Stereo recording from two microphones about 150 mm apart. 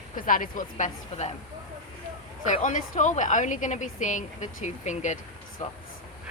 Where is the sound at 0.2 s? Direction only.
65° left (ahead or behind).